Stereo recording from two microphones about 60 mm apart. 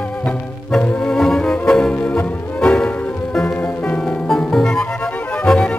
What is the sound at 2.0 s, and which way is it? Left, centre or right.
Music, left.